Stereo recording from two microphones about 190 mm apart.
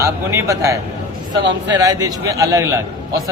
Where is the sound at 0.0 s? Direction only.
15° right (ahead or behind).